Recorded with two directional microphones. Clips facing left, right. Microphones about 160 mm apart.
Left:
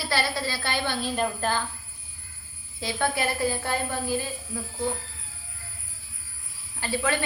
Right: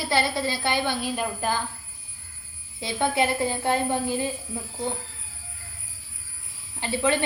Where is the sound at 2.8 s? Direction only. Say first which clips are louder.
Right 3 dB; 20° right (ahead or behind).